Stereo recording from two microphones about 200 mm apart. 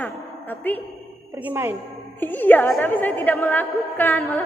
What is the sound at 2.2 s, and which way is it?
A woman's voice, 10° left (ahead or behind).